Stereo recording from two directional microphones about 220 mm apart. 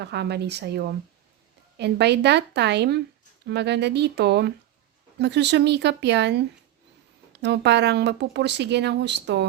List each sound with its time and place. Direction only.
0.0 s speech: 50° right (ahead or behind)